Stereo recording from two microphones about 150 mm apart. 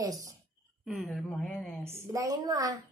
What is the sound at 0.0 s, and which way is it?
Speech, 25° right (ahead or behind).